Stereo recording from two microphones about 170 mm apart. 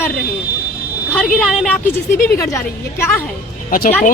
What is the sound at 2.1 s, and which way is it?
Speech, 55° left (ahead or behind).